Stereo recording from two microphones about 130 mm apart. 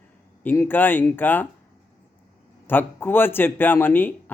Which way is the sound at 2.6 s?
15° left (ahead or behind).